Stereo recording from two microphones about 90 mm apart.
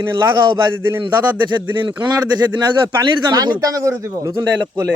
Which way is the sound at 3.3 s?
45° right (ahead or behind).